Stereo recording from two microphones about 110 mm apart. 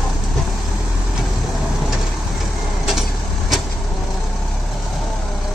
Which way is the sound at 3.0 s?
Centre (ahead or behind).